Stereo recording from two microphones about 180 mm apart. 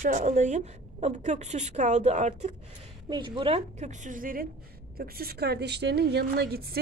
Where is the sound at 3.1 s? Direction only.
25° right (ahead or behind).